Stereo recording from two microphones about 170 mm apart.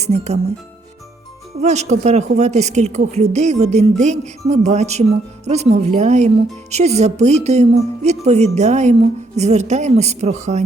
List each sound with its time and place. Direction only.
0.0 s speech: 40° right (ahead or behind)
1.6 s speech: 40° right (ahead or behind)